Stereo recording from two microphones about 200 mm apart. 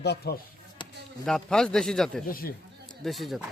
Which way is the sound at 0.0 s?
55° left (ahead or behind).